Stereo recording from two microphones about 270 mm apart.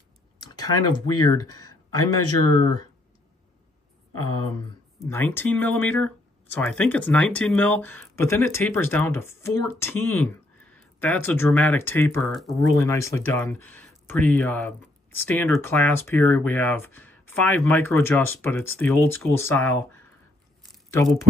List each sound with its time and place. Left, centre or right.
0.4 s a sound: centre
1.2 s speech: centre
4.9 s speech: centre
12.5 s speech: centre